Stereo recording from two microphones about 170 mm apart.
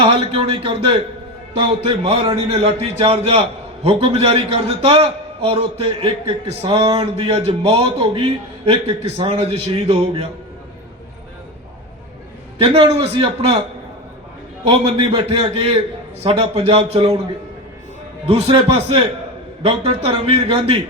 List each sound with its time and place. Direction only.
0.0 s a man's voice: 35° right (ahead or behind)
12.5 s a man's voice: 35° right (ahead or behind)
14.7 s a man's voice: 30° right (ahead or behind)
18.3 s a man's voice: 30° right (ahead or behind)